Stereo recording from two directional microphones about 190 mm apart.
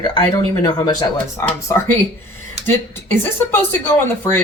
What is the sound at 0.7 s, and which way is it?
Speech, 20° left (ahead or behind).